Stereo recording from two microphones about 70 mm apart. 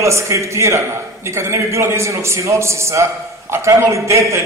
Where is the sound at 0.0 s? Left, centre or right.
Right.